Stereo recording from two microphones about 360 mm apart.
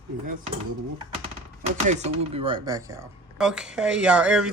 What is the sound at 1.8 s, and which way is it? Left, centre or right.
Speech, centre.